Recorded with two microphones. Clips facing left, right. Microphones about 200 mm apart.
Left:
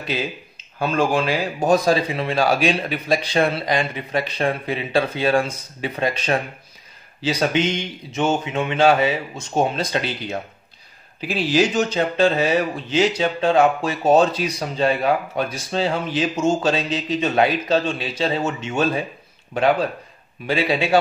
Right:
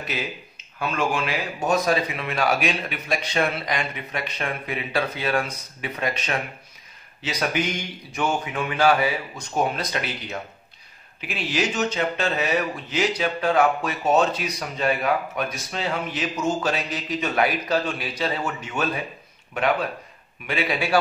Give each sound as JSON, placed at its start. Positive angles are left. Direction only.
{"t": 0.1, "sound": "speech", "side_deg": 30}
{"t": 20.4, "sound": "speech", "side_deg": 25}